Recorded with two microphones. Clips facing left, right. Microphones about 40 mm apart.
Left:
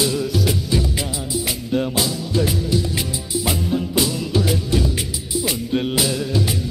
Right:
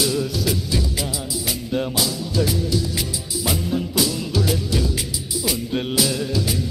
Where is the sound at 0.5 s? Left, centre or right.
Left.